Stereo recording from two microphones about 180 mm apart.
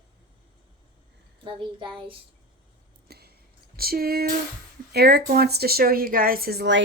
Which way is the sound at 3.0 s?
60° right (ahead or behind).